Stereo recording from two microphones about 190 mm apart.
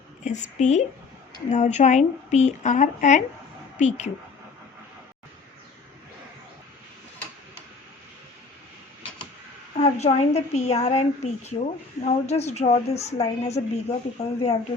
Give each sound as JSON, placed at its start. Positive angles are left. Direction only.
{"t": 0.3, "sound": "a woman's voice", "side_deg": 40}
{"t": 9.7, "sound": "a woman's voice", "side_deg": 35}